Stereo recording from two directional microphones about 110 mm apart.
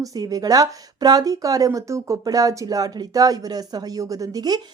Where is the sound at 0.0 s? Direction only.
35° right (ahead or behind).